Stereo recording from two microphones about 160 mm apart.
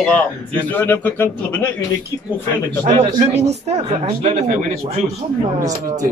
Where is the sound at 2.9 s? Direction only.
45° right (ahead or behind).